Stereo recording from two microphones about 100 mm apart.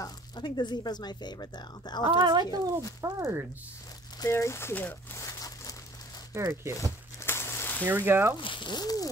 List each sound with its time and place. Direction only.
0.4 s speech: 45° left (ahead or behind)
2.0 s speech: 45° right (ahead or behind)
3.0 s speech: 25° right (ahead or behind)
4.2 s speech: 30° left (ahead or behind)
5.1 s crumpling: 35° left (ahead or behind)
6.3 s speech: 25° right (ahead or behind)
7.2 s a sound: 25° left (ahead or behind)
7.8 s speech: 20° right (ahead or behind)
8.4 s speech: 55° left (ahead or behind); by 9.1 s 40° left (ahead or behind)